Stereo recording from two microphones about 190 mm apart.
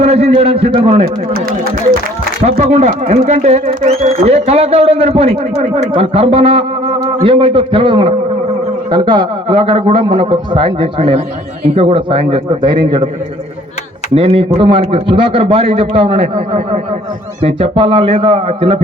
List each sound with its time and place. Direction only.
0.0 s a man's voice: 35° right (ahead or behind)
1.0 s speech: 50° right (ahead or behind)
2.4 s a man's voice: 35° right (ahead or behind)
14.2 s a man's voice: 30° right (ahead or behind)